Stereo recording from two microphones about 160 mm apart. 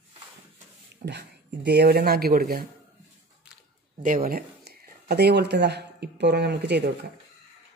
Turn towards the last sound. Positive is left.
turn(degrees=-90)